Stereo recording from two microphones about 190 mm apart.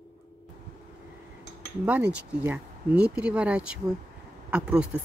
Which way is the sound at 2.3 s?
10° right (ahead or behind).